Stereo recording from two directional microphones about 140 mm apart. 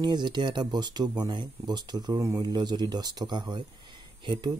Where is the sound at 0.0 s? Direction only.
30° right (ahead or behind).